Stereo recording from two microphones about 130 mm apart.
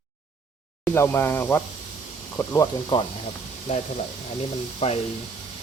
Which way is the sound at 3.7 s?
55° left (ahead or behind).